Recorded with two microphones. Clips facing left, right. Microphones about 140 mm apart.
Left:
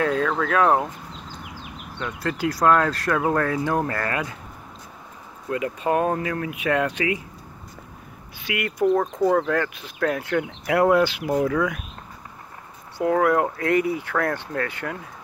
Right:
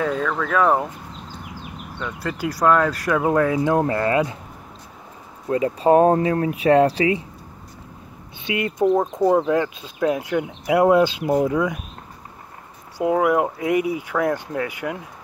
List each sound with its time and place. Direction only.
0.0 s speech: centre (ahead or behind)
2.0 s speech: 5° right (ahead or behind); by 4.4 s 25° right (ahead or behind)
5.5 s speech: 30° right (ahead or behind)
8.5 s speech: 25° right (ahead or behind)
13.0 s speech: 15° right (ahead or behind)